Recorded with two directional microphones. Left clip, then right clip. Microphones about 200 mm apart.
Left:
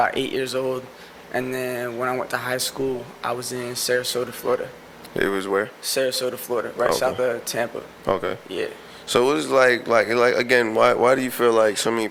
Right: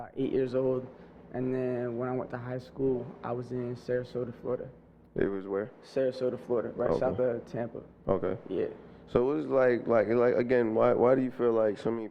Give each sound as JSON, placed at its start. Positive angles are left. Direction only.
{"t": 0.0, "sound": "speech", "side_deg": 5}
{"t": 2.7, "sound": "speech", "side_deg": 35}
{"t": 3.4, "sound": "speech", "side_deg": 5}
{"t": 6.5, "sound": "speech", "side_deg": 15}
{"t": 6.7, "sound": "speech", "side_deg": 5}